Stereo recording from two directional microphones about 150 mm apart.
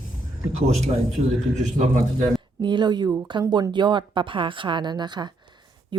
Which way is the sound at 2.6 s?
30° right (ahead or behind).